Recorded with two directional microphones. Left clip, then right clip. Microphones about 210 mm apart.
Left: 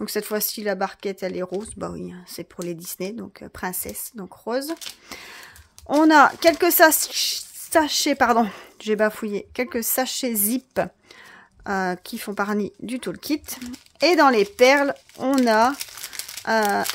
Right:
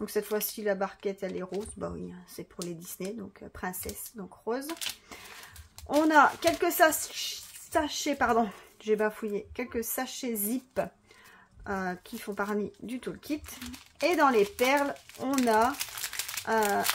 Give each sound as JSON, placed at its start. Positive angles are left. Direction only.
{"t": 0.0, "sound": "speech", "side_deg": 45}
{"t": 5.9, "sound": "speech", "side_deg": 45}